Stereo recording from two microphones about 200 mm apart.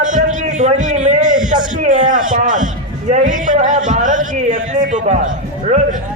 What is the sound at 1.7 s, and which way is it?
A man's voice, 40° right (ahead or behind).